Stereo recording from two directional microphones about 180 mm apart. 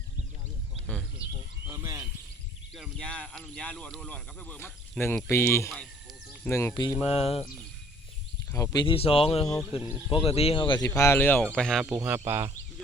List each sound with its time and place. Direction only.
1.6 s a sound: 20° right (ahead or behind)
2.7 s speech: centre (ahead or behind); by 7.0 s 20° left (ahead or behind)
7.0 s speech: 35° left (ahead or behind)
8.5 s speech: 20° left (ahead or behind); by 11.9 s 5° left (ahead or behind)
11.9 s speech: 10° right (ahead or behind)